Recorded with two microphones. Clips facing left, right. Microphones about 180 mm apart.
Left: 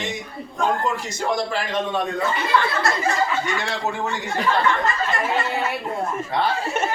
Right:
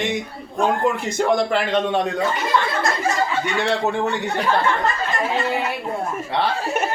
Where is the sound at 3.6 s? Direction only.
65° right (ahead or behind).